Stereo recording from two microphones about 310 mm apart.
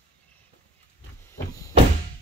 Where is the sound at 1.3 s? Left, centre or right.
Centre.